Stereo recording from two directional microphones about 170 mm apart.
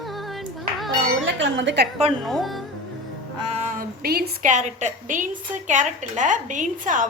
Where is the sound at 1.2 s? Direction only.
90° right.